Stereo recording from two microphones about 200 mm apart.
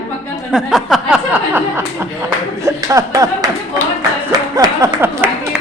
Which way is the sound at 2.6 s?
15° right (ahead or behind).